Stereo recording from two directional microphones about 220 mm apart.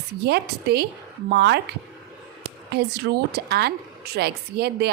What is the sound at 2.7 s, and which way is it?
A woman's voice, 45° right (ahead or behind).